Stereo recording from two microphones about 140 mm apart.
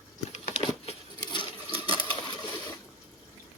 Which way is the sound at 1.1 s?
30° left (ahead or behind).